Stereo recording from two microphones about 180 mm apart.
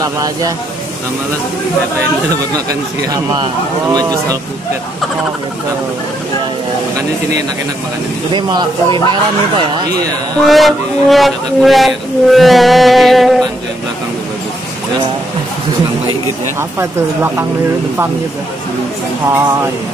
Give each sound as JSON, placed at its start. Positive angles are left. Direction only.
{"t": 0.0, "sound": "speech", "side_deg": -20}
{"t": 2.5, "sound": "speech", "side_deg": -20}
{"t": 8.3, "sound": "speech", "side_deg": -25}
{"t": 10.3, "sound": "speech", "side_deg": 0}
{"t": 16.5, "sound": "speech", "side_deg": -15}
{"t": 19.2, "sound": "speech", "side_deg": -15}